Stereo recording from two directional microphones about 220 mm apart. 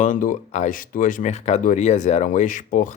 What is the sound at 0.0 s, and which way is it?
Speech, 35° left (ahead or behind).